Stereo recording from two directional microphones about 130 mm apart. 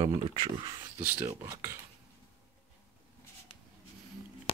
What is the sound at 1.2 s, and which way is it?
Speech, 20° right (ahead or behind).